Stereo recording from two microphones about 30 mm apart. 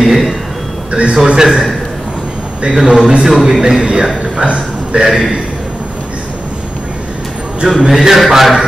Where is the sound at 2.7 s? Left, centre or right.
Right.